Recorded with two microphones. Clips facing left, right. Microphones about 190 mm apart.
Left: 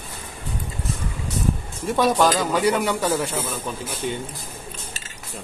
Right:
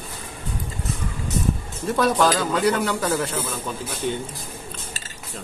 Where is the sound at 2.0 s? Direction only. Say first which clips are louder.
Left 1 dB; 10° left (ahead or behind).